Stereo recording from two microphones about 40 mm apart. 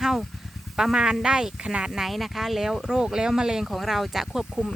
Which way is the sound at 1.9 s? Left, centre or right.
Centre.